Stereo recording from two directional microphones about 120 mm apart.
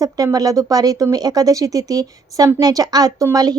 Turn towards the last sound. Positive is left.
turn(degrees=-35)  # may be behind; listen again after turning